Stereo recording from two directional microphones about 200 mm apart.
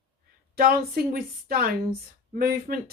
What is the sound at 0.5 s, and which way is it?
Speech, 50° right (ahead or behind).